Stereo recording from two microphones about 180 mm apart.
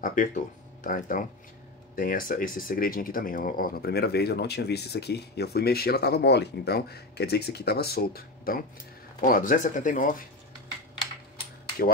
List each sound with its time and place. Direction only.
0.0 s speech: 50° left (ahead or behind)